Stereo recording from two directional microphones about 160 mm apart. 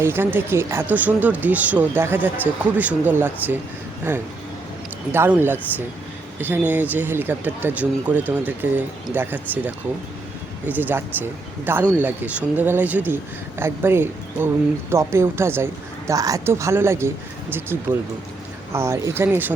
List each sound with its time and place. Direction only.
0.0 s speech: 15° right (ahead or behind)
18.7 s speech: 15° right (ahead or behind)